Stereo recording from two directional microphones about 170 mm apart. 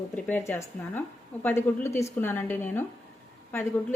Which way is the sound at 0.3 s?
10° left (ahead or behind).